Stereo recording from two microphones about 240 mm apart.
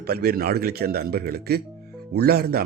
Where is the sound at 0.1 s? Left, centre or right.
Right.